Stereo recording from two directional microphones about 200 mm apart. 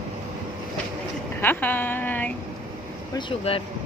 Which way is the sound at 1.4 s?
10° left (ahead or behind).